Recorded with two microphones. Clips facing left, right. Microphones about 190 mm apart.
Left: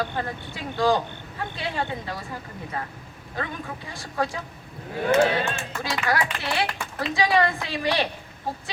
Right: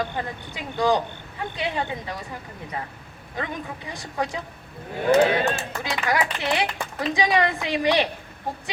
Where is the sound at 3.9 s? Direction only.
20° right (ahead or behind).